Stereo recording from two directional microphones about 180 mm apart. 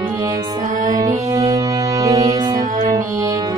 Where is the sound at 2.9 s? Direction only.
20° right (ahead or behind).